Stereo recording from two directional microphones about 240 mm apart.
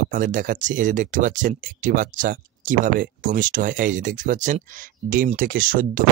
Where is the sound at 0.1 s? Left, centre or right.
Right.